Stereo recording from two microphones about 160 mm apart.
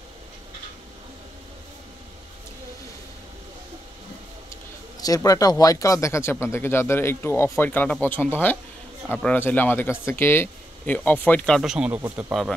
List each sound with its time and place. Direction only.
5.0 s speech: 20° left (ahead or behind); by 12.5 s centre (ahead or behind)